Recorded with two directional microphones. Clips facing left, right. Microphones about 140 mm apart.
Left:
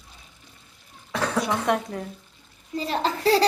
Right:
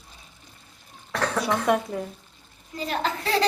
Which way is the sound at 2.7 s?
30° left (ahead or behind).